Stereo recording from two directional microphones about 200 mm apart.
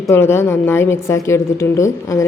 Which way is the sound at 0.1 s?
15° left (ahead or behind).